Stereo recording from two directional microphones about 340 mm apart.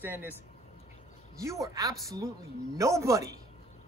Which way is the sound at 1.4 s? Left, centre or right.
Centre.